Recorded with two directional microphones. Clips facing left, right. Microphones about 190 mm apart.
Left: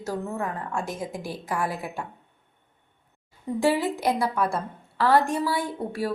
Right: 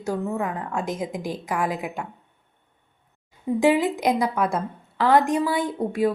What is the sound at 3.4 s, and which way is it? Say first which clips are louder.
A woman's voice: right 4 dB; 15° right (ahead or behind).